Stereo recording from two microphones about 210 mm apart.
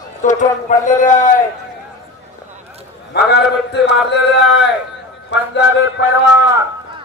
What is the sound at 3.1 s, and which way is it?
Speech, 50° left (ahead or behind).